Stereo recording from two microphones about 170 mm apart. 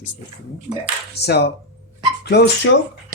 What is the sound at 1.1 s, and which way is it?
Speech, 75° left (ahead or behind).